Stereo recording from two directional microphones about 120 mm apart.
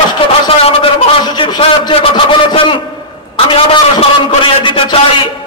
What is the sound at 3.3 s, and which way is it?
A man's voice, 45° left (ahead or behind).